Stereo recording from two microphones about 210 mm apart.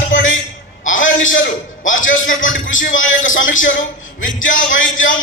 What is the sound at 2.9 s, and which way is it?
Speech, 65° left (ahead or behind).